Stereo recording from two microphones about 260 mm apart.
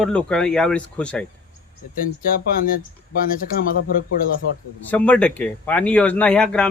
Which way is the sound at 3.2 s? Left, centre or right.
Left.